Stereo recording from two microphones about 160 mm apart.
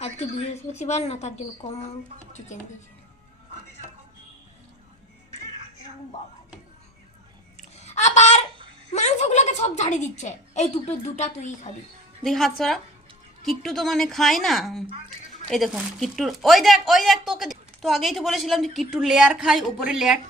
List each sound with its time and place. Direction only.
0.0 s a woman's voice: 40° left (ahead or behind)
7.9 s a sound: 45° left (ahead or behind)
8.9 s a woman's voice: 45° left (ahead or behind)
12.2 s speech: centre (ahead or behind)